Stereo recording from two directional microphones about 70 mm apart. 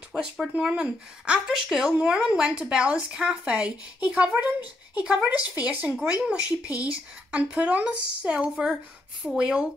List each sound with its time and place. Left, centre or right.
0.4 s speech: centre